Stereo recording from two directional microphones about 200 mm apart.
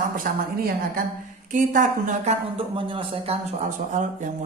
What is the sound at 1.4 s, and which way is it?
A woman's voice, 40° right (ahead or behind).